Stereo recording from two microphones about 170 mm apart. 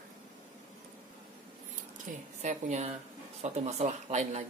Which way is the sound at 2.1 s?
45° right (ahead or behind).